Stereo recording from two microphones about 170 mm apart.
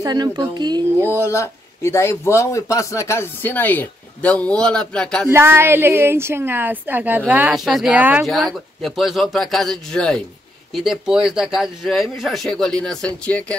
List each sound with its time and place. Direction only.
0.0 s speech: 25° right (ahead or behind)
1.1 s a man's voice: 15° left (ahead or behind)
5.3 s a woman's voice: 15° right (ahead or behind); by 13.6 s 5° left (ahead or behind)